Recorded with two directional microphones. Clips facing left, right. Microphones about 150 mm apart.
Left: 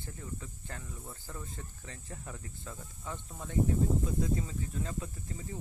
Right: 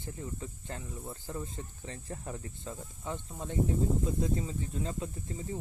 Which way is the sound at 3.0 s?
25° right (ahead or behind).